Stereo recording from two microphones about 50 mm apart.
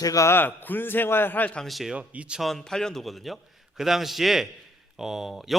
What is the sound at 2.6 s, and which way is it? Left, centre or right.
A man's voice, centre.